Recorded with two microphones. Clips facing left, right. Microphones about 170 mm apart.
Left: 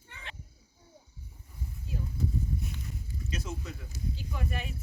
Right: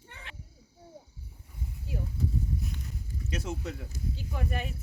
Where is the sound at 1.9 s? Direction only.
70° right (ahead or behind).